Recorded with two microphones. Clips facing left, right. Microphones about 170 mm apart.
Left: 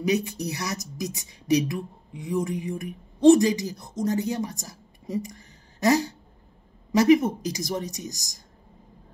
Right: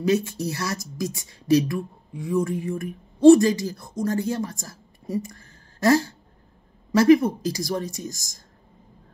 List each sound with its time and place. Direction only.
0.0 s speech: 15° left (ahead or behind)